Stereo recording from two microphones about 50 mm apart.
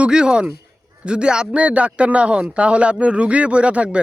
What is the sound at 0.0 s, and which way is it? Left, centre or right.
A man's voice, centre.